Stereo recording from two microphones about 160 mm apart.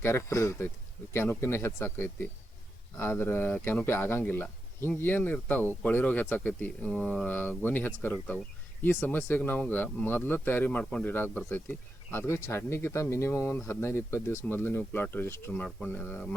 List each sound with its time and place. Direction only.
0.0 s speech: 15° left (ahead or behind)